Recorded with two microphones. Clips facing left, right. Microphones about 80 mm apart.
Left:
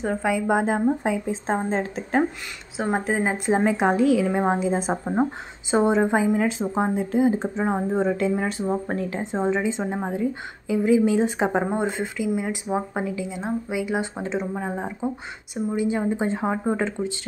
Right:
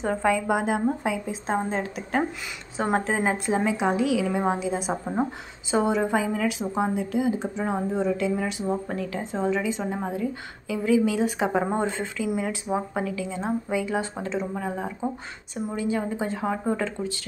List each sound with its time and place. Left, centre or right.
0.0 s a woman's voice: centre
0.5 s speech: left
2.8 s a woman's voice: centre
3.6 s a woman's voice: left
9.2 s speech: left
11.7 s a woman's voice: centre
13.4 s speech: centre